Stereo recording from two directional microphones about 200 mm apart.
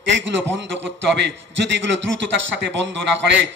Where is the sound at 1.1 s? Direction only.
60° right (ahead or behind).